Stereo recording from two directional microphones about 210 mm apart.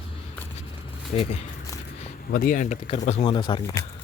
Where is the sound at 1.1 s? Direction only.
30° left (ahead or behind).